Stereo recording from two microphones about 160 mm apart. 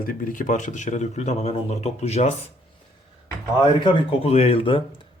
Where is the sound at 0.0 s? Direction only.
60° left (ahead or behind); by 2.3 s 45° left (ahead or behind).